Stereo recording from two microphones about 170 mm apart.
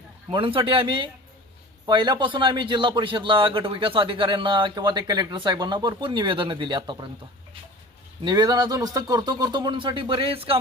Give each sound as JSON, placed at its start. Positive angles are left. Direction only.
{"t": 0.3, "sound": "a man's voice", "side_deg": -30}
{"t": 8.2, "sound": "a man's voice", "side_deg": -25}